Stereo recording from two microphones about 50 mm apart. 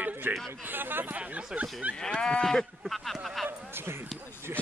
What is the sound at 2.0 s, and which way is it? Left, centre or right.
Cattle, centre.